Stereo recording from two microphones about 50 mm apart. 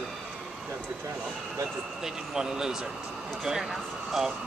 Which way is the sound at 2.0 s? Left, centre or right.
Centre.